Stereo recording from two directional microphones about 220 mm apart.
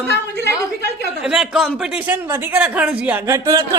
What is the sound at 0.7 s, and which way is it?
Speech, 50° left (ahead or behind).